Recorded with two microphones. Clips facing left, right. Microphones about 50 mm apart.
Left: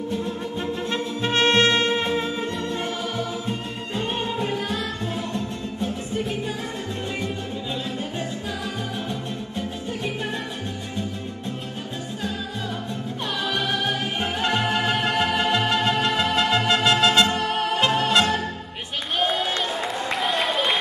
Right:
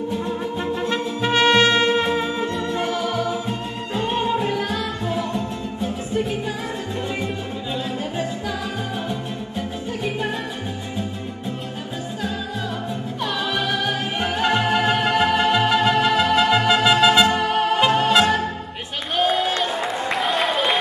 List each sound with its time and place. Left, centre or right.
0.1 s music: centre
1.3 s brass instrument: right
2.0 s music: centre
2.6 s music: right
3.3 s music: centre
13.2 s music: centre
19.1 s a sound: centre
20.1 s applause: centre